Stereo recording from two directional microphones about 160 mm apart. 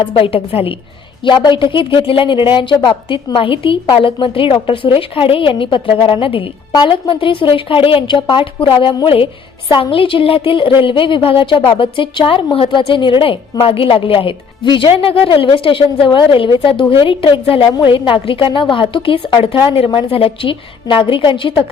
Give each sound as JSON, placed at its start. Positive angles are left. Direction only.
{"t": 0.0, "sound": "a woman's voice", "side_deg": 35}